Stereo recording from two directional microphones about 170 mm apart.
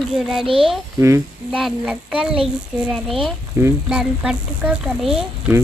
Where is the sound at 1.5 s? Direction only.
5° right (ahead or behind).